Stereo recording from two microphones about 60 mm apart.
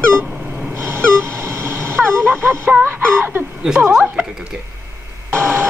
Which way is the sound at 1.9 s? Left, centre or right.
Right.